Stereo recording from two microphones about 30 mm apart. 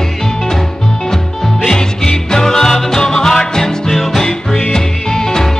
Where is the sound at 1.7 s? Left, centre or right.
Left.